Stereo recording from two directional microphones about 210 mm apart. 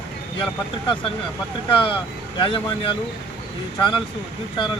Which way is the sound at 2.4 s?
25° left (ahead or behind).